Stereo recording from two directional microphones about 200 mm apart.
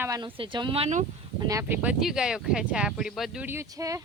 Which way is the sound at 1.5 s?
15° right (ahead or behind).